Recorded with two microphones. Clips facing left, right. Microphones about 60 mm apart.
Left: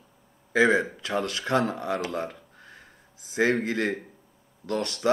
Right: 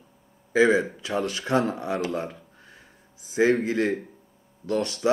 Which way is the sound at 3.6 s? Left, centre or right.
Left.